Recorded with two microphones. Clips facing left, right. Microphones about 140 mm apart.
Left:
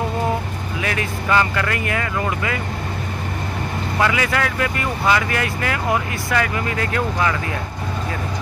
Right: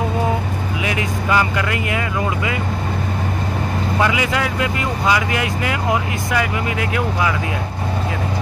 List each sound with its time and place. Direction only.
0.8 s speech: 15° right (ahead or behind)
4.0 s speech: 20° right (ahead or behind)